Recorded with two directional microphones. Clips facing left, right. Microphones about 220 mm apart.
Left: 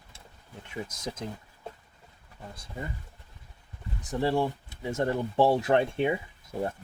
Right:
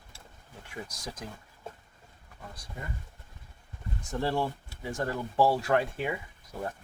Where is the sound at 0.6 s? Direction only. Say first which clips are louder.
Left 5 dB; 20° left (ahead or behind).